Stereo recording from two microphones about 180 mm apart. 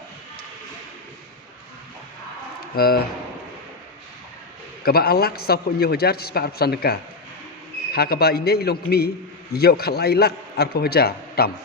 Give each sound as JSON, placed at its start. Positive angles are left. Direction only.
{"t": 2.7, "sound": "a man's voice", "side_deg": 60}
{"t": 4.9, "sound": "a man's voice", "side_deg": 60}